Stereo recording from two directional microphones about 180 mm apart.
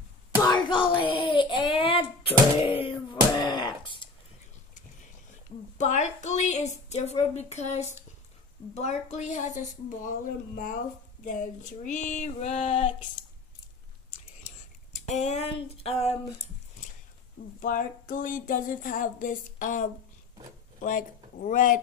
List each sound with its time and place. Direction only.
0.7 s a sound: 30° left (ahead or behind)
5.8 s a woman's voice: 40° left (ahead or behind)
15.0 s a woman's voice: 40° left (ahead or behind)
17.6 s speech: 45° left (ahead or behind)
21.4 s speech: 50° left (ahead or behind)